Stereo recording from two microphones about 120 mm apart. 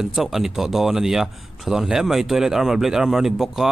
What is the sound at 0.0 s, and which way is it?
Speech, centre (ahead or behind).